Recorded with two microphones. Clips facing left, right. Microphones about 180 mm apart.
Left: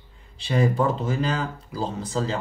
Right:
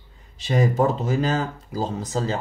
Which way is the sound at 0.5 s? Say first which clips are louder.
Right 2 dB; 40° right (ahead or behind).